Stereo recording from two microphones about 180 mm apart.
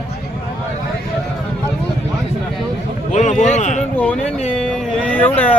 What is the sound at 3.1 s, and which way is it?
Speech, 45° left (ahead or behind).